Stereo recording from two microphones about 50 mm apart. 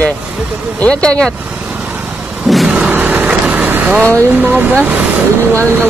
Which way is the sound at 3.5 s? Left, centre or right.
Right.